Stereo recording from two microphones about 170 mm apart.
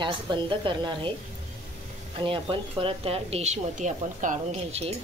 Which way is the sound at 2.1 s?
30° right (ahead or behind).